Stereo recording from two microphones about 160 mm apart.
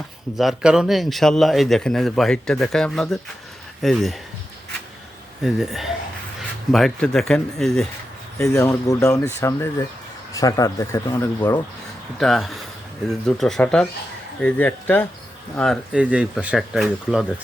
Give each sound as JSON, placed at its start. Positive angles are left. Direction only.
{"t": 0.3, "sound": "a man's voice", "side_deg": 0}
{"t": 5.4, "sound": "a man's voice", "side_deg": -5}
{"t": 8.4, "sound": "speech", "side_deg": 20}
{"t": 12.2, "sound": "a man's voice", "side_deg": 0}
{"t": 15.9, "sound": "a man's voice", "side_deg": -10}